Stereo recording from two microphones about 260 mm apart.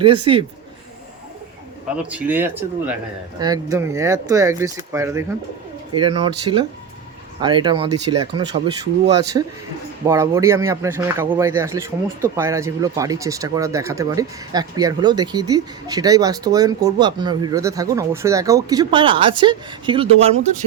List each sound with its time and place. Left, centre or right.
0.0 s speech: centre
2.0 s speech: centre
6.0 s speech: right